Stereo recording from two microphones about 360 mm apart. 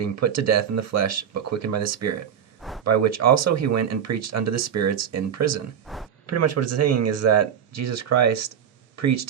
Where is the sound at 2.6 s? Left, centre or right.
Centre.